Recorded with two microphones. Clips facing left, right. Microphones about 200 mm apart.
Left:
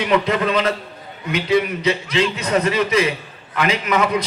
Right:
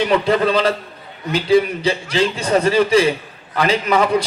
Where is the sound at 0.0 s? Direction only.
35° right (ahead or behind).